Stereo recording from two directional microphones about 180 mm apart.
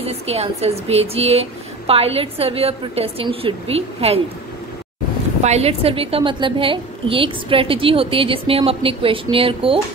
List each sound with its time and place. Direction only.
0.0 s a woman's voice: 35° right (ahead or behind)
5.4 s a woman's voice: 35° right (ahead or behind)